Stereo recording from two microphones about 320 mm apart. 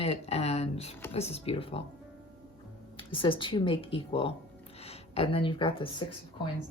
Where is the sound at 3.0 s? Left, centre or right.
Centre.